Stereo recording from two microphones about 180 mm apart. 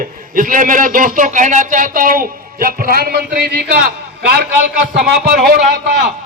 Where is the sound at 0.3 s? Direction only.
50° right (ahead or behind).